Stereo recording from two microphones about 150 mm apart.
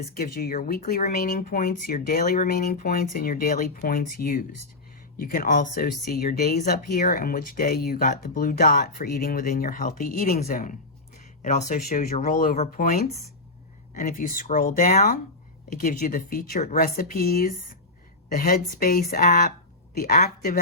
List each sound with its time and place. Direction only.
0.0 s speech: 70° left (ahead or behind); by 8.1 s 90° left
8.1 s speech: 65° left (ahead or behind)
11.4 s speech: 55° left (ahead or behind); by 15.2 s 80° left
15.8 s speech: 65° left (ahead or behind); by 20.1 s 85° left